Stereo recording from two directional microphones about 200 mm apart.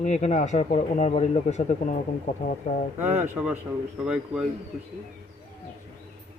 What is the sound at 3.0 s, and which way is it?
A man's voice, 10° right (ahead or behind).